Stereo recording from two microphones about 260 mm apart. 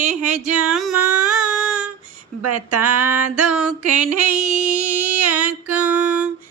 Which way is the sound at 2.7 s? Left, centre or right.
Right.